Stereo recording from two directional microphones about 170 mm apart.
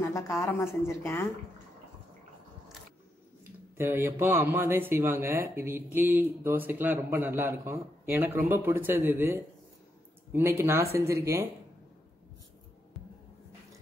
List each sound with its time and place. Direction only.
0.0 s a woman's voice: 15° left (ahead or behind)
3.7 s a man's voice: 15° right (ahead or behind)